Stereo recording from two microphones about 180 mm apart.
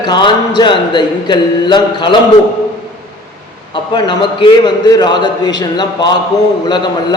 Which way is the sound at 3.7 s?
25° left (ahead or behind).